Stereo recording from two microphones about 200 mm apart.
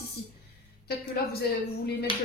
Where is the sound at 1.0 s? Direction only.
50° left (ahead or behind).